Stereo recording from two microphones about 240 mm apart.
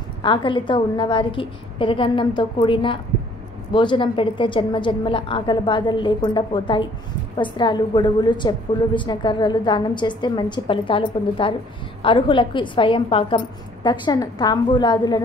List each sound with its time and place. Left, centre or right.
0.2 s a woman's voice: centre